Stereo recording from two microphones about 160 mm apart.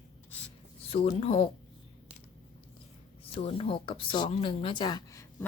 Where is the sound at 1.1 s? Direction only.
35° left (ahead or behind).